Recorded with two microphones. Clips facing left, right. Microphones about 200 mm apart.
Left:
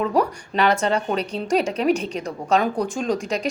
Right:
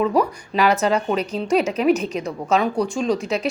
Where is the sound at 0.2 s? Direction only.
5° right (ahead or behind).